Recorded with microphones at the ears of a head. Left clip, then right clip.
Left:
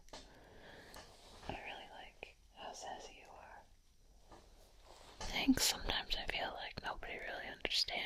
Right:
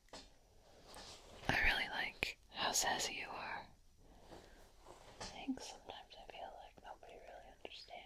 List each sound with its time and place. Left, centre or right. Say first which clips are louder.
1.0 s whispering: right 10 dB; right
5.3 s whispering: left 15 dB; left